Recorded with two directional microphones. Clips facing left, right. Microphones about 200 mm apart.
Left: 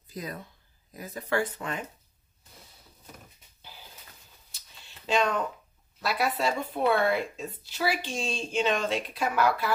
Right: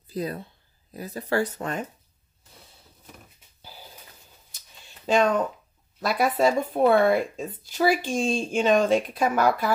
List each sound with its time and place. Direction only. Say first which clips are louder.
0.1 s speech: right 7 dB; 35° right (ahead or behind)
5.0 s speech: right 5 dB; 50° right (ahead or behind)